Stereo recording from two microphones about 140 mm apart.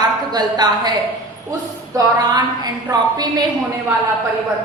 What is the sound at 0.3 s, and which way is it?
Speech, 30° right (ahead or behind).